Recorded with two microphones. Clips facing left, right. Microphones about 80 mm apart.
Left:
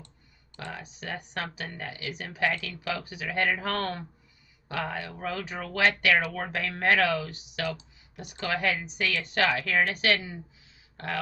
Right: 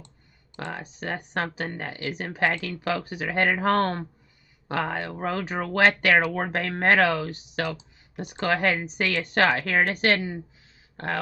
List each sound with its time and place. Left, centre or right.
0.7 s speech: right